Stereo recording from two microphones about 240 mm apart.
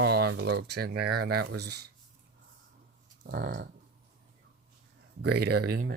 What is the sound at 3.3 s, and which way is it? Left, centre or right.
Speech, right.